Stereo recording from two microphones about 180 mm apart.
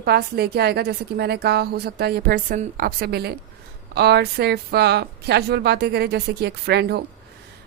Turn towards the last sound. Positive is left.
turn(degrees=-65)  # may be behind; listen again after turning